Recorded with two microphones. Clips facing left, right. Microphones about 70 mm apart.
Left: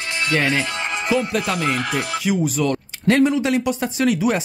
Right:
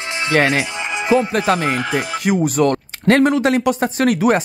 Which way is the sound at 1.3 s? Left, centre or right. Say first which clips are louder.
Right 4 dB; right.